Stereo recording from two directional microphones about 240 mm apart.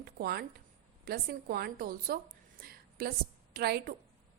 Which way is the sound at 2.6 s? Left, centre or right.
Right.